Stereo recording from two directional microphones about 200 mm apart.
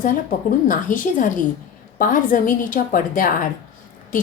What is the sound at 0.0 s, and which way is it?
A woman's voice, 40° left (ahead or behind).